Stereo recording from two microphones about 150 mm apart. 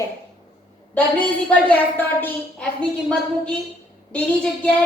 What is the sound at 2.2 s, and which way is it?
A child's voice, 10° left (ahead or behind).